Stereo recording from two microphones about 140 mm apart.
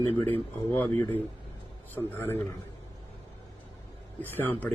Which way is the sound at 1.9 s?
15° left (ahead or behind).